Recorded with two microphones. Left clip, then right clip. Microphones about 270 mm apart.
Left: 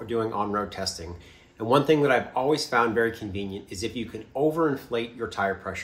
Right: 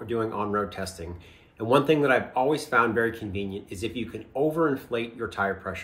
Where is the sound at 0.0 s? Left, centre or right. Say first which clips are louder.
Left 1 dB; centre.